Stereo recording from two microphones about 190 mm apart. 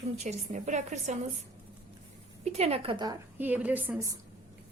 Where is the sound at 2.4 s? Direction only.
35° right (ahead or behind).